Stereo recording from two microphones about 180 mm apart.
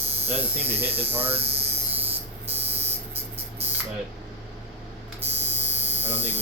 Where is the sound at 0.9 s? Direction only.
30° right (ahead or behind).